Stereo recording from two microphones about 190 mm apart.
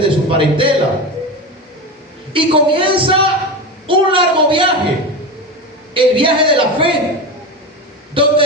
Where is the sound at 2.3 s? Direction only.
25° right (ahead or behind).